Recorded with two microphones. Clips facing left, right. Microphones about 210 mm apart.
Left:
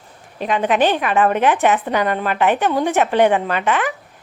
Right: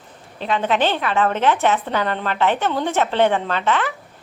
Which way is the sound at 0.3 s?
15° left (ahead or behind).